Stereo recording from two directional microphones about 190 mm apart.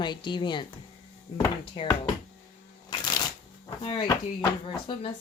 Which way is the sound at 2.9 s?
20° left (ahead or behind).